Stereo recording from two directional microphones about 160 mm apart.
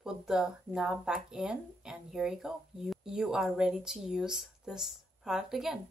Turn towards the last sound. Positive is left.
turn(degrees=0)  # may be behind; listen again after turning